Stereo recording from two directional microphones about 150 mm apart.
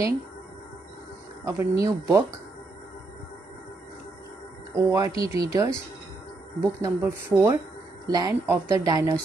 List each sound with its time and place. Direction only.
1.4 s a woman's voice: 20° right (ahead or behind)
4.7 s a woman's voice: 20° right (ahead or behind)